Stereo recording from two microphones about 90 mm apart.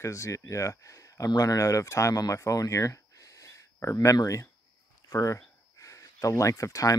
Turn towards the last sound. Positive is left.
turn(degrees=40)  # may be behind; listen again after turning